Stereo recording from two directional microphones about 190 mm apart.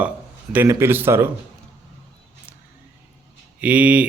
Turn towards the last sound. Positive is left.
turn(degrees=-5)  # may be behind; listen again after turning